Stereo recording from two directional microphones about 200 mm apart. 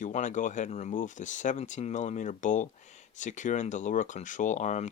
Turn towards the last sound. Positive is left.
turn(degrees=35)  # may be behind; listen again after turning